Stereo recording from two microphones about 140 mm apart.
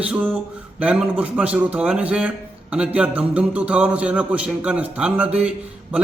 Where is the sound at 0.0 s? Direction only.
10° right (ahead or behind).